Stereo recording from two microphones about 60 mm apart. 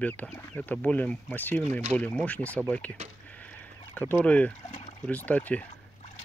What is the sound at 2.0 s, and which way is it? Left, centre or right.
Speech, left.